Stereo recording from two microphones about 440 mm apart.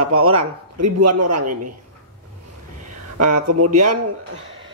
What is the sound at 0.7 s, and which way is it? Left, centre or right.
Music, right.